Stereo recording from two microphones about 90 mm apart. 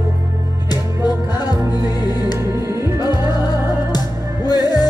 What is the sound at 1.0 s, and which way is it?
Music, 50° left (ahead or behind).